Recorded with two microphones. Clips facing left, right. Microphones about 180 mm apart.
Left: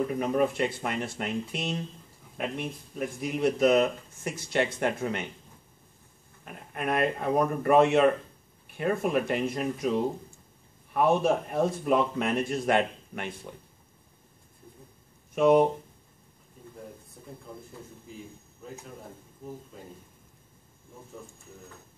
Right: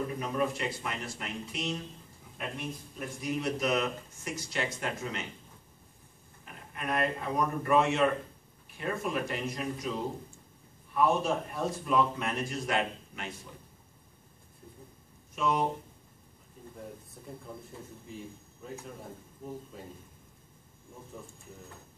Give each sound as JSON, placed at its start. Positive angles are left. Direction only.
{"t": 0.2, "sound": "a man's voice", "side_deg": 55}
{"t": 3.2, "sound": "a man's voice", "side_deg": 60}
{"t": 6.4, "sound": "a man's voice", "side_deg": 55}
{"t": 15.3, "sound": "speech", "side_deg": 55}